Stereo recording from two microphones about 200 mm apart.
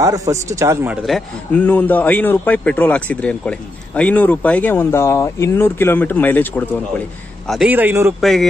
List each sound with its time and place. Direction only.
0.0 s a man's voice: 15° right (ahead or behind)
1.0 s speech: 5° left (ahead or behind)
7.4 s a man's voice: 5° right (ahead or behind)
8.2 s speech: centre (ahead or behind)